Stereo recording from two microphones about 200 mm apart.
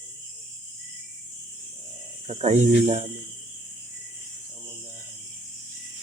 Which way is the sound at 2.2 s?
35° right (ahead or behind).